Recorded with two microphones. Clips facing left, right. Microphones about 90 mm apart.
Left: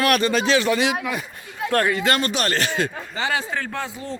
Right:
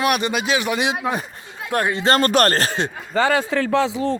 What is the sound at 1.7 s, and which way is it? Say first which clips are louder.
Speech: right 1 dB; 20° right (ahead or behind).